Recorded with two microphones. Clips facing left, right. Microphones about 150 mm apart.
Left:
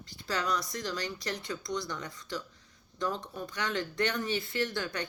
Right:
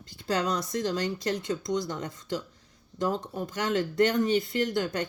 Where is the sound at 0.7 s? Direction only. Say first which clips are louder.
Right 7 dB; 25° right (ahead or behind).